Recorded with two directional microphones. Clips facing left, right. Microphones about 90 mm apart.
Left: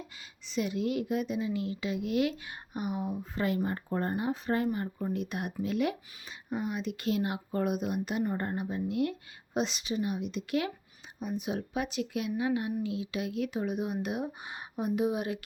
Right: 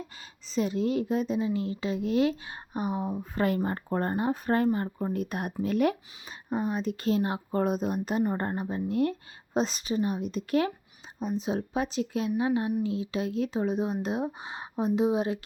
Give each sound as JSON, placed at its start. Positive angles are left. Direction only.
{"t": 0.4, "sound": "speech", "side_deg": -35}
{"t": 3.2, "sound": "speech", "side_deg": -50}
{"t": 11.2, "sound": "speech", "side_deg": -30}